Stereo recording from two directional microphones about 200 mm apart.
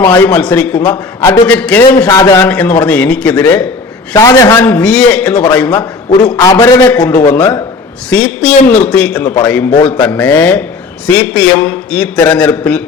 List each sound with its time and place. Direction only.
0.0 s a man's voice: 10° left (ahead or behind)
2.0 s a man's voice: 20° left (ahead or behind)
6.3 s a man's voice: 15° left (ahead or behind)